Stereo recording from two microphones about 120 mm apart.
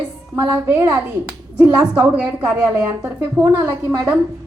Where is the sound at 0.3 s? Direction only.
20° right (ahead or behind).